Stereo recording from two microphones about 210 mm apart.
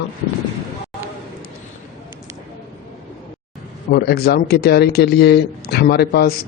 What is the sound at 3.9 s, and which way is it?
Speech, 50° left (ahead or behind).